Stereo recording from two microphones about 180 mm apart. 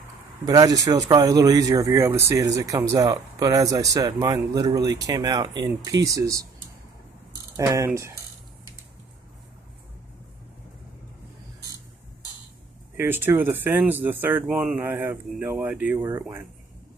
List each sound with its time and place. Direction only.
0.5 s speech: 20° right (ahead or behind)
7.5 s speech: 20° right (ahead or behind)
12.9 s speech: 10° right (ahead or behind)